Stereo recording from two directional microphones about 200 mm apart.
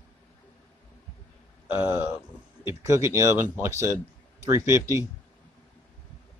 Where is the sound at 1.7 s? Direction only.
10° right (ahead or behind).